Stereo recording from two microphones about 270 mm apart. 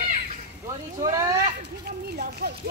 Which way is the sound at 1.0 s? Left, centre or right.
Centre.